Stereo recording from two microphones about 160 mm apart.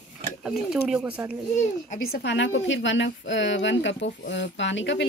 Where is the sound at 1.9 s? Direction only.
75° left (ahead or behind).